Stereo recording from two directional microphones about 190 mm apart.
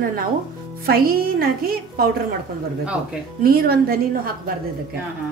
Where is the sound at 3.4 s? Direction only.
50° right (ahead or behind).